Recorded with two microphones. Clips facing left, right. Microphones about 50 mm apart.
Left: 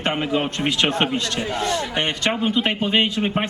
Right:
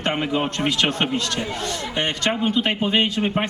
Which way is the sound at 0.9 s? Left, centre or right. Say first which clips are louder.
Left 1 dB; left.